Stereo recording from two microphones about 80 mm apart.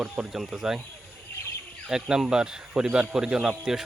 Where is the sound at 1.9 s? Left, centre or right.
Centre.